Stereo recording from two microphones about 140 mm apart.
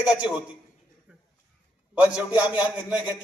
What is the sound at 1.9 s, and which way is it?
A man's voice, 10° right (ahead or behind).